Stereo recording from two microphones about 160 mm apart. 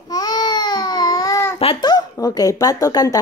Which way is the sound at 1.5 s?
30° left (ahead or behind).